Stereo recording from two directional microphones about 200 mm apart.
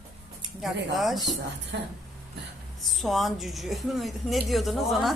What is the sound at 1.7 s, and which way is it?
Speech, 60° right (ahead or behind).